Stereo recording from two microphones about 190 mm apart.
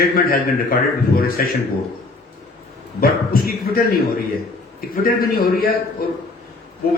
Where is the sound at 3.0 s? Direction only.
50° left (ahead or behind).